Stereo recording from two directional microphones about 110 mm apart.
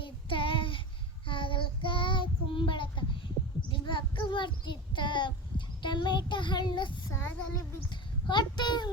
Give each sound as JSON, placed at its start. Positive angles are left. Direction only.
{"t": 0.0, "sound": "child singing", "side_deg": 50}
{"t": 7.1, "sound": "child singing", "side_deg": 20}
{"t": 8.3, "sound": "a sound", "side_deg": 40}